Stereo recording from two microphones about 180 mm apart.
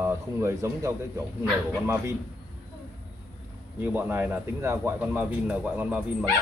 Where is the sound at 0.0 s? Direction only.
15° right (ahead or behind).